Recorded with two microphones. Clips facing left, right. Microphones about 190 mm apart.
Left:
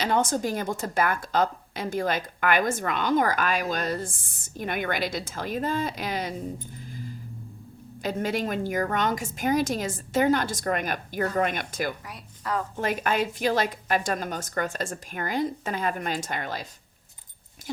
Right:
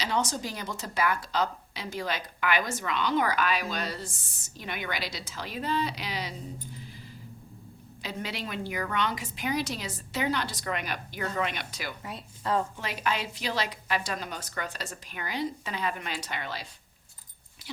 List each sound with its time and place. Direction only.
0.0 s a woman's voice: 50° left (ahead or behind)
8.0 s a woman's voice: 50° left (ahead or behind)
12.0 s speech: 25° right (ahead or behind)
12.7 s a woman's voice: 50° left (ahead or behind)